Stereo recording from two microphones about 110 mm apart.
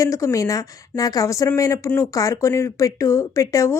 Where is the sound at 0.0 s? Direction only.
30° left (ahead or behind).